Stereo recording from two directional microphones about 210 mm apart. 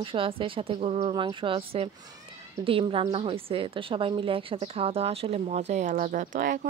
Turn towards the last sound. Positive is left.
turn(degrees=-40)  # may be behind; listen again after turning